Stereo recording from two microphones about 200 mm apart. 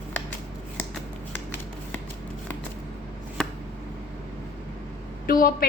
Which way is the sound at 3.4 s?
5° left (ahead or behind).